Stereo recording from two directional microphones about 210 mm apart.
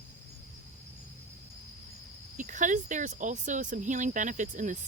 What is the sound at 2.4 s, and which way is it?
Speech, 35° right (ahead or behind).